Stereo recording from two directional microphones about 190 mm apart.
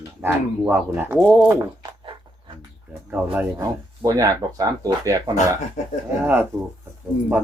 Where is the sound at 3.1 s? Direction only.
10° right (ahead or behind).